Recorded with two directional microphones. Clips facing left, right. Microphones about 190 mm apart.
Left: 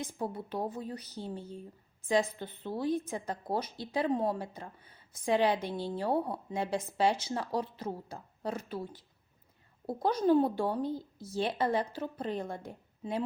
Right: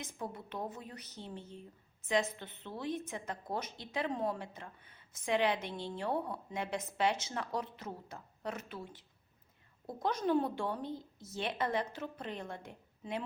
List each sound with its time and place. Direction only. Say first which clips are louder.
0.0 s a woman's voice: left 6 dB; 35° left (ahead or behind)